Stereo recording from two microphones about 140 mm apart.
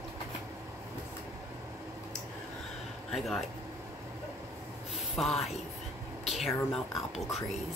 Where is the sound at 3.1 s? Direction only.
Centre (ahead or behind).